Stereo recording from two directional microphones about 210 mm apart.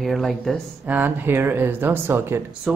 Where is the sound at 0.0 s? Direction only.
Centre (ahead or behind).